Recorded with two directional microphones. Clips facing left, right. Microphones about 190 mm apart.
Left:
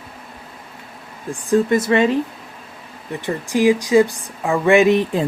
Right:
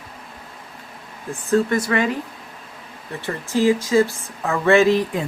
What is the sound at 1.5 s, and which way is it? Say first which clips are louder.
Speech: left 3 dB; 20° left (ahead or behind).